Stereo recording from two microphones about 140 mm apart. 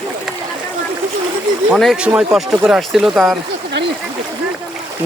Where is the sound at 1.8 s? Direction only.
5° right (ahead or behind).